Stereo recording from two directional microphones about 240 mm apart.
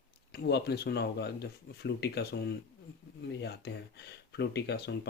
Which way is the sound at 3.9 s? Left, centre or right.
Left.